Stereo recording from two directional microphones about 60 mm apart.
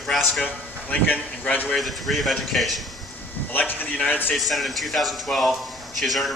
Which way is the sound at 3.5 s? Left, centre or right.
Left.